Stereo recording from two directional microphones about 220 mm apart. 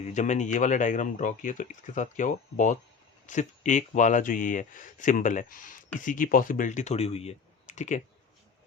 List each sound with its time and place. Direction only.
0.1 s speech: 35° left (ahead or behind)